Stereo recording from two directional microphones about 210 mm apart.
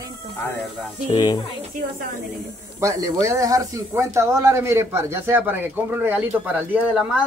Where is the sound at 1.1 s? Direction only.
20° left (ahead or behind).